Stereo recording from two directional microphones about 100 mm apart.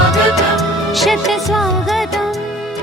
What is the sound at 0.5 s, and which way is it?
Music, centre (ahead or behind).